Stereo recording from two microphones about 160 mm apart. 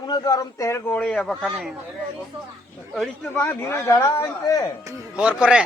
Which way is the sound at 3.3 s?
15° left (ahead or behind).